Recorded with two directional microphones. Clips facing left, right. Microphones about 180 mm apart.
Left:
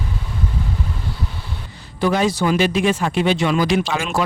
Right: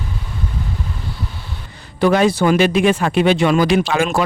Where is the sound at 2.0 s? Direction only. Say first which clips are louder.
Right 4 dB; 65° right (ahead or behind).